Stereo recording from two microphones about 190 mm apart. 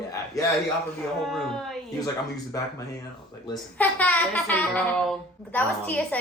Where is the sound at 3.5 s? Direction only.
10° left (ahead or behind).